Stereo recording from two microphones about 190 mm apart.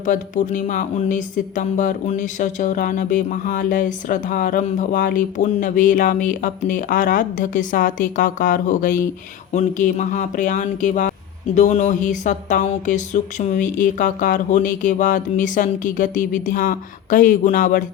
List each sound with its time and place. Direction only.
0.0 s speech: 40° left (ahead or behind)